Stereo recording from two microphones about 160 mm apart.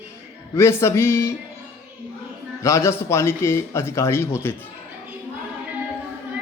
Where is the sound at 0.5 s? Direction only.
15° left (ahead or behind).